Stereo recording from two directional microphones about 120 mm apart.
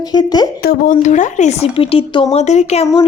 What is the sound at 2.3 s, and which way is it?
Speech, 70° left (ahead or behind).